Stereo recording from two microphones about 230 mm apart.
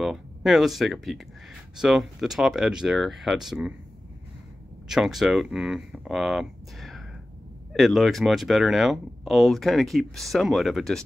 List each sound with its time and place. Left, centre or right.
0.0 s speech: centre
4.8 s speech: centre